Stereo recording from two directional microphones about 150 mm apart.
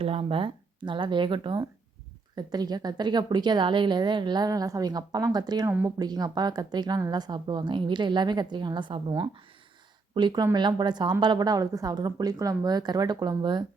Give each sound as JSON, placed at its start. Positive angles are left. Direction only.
{"t": 0.0, "sound": "a woman's voice", "side_deg": -40}